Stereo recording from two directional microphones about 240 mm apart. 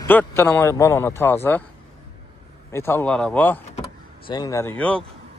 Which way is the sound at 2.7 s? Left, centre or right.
Centre.